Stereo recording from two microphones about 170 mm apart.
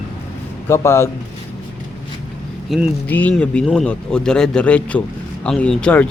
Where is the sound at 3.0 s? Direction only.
10° left (ahead or behind).